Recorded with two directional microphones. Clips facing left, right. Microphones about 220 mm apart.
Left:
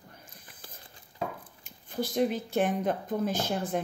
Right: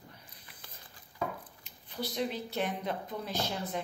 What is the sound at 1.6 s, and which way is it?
Speech, 45° left (ahead or behind).